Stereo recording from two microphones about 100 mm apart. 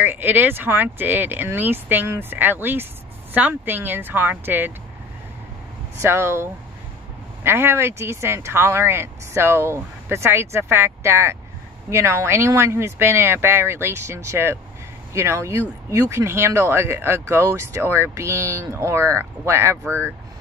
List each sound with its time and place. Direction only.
0.0 s speech: 20° right (ahead or behind)
5.9 s speech: 30° right (ahead or behind)